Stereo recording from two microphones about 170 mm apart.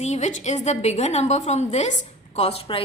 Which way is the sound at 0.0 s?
40° left (ahead or behind).